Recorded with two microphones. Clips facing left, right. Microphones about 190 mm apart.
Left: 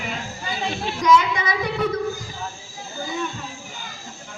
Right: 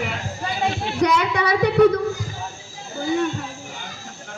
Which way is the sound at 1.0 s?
65° right (ahead or behind).